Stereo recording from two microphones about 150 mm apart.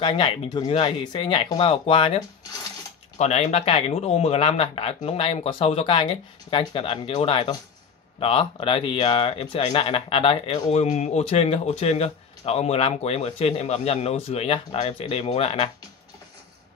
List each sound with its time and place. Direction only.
0.0 s speech: 35° left (ahead or behind)